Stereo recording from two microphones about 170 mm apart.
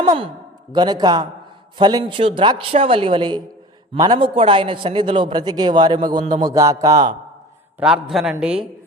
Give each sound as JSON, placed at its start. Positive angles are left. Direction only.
{"t": 0.0, "sound": "a man's voice", "side_deg": -25}
{"t": 7.8, "sound": "a man's voice", "side_deg": -10}